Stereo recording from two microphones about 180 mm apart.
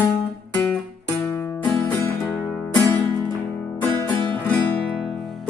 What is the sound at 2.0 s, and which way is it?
Music, 5° left (ahead or behind).